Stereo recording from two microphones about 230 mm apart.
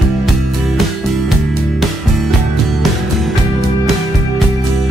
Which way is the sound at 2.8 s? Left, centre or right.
Centre.